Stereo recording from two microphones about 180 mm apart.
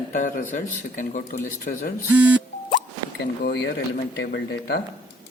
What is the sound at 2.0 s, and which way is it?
Speech, 10° right (ahead or behind).